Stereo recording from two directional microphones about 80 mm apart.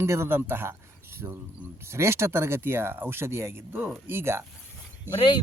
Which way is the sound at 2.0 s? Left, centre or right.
Right.